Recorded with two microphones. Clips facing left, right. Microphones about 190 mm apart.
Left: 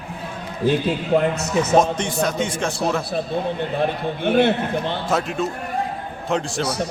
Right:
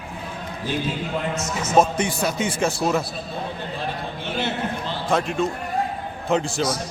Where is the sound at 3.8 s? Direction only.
55° left (ahead or behind).